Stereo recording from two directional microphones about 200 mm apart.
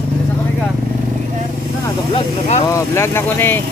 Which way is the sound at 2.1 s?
30° left (ahead or behind).